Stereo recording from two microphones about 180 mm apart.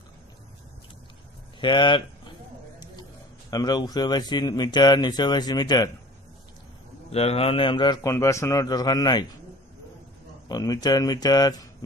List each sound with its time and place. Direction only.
1.6 s speech: 25° left (ahead or behind)
7.1 s speech: 35° left (ahead or behind)
10.5 s speech: 20° left (ahead or behind)